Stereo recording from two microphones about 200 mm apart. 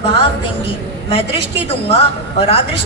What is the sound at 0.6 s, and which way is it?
Speech, 25° left (ahead or behind).